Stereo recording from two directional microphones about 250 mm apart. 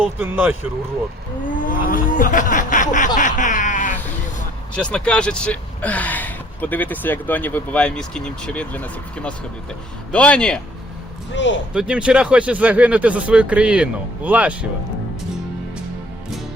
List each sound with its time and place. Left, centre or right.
0.2 s speech: centre
1.6 s a sound: left
4.7 s speech: centre
11.3 s speech: left
11.7 s speech: centre